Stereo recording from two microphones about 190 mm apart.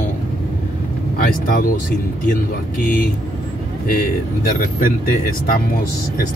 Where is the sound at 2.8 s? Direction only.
45° left (ahead or behind).